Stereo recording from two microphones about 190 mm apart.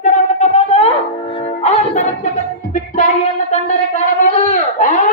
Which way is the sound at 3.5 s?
40° left (ahead or behind).